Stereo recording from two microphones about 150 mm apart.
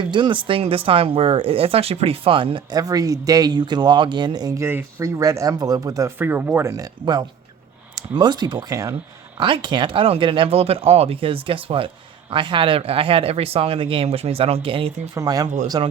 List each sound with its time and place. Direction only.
0.0 s speech: 30° right (ahead or behind)
9.4 s speech: 30° right (ahead or behind)
15.2 s speech: 25° right (ahead or behind)